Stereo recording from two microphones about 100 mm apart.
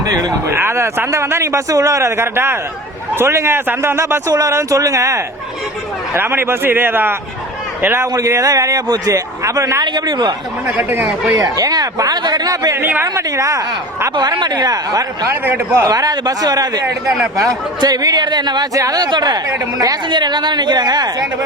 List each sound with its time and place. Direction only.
0.2 s speech: 40° right (ahead or behind)
0.5 s a man's voice: 25° right (ahead or behind)
8.0 s speech: 35° right (ahead or behind)
9.8 s speech: 45° right (ahead or behind)
10.7 s a man's voice: 20° right (ahead or behind)
11.3 s speech: 35° right (ahead or behind)
12.7 s speech: 20° right (ahead or behind); by 15.3 s 40° right (ahead or behind)
15.3 s a man's voice: 25° right (ahead or behind)
15.9 s speech: 40° right (ahead or behind)
20.1 s speech: 50° right (ahead or behind)